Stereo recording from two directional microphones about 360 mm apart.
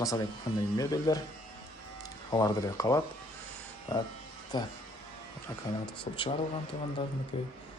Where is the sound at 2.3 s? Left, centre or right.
Centre.